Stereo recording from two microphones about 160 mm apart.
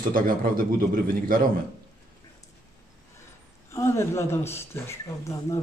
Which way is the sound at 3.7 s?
20° left (ahead or behind).